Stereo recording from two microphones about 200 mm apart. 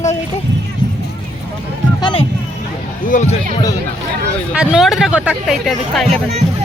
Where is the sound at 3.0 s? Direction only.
40° left (ahead or behind).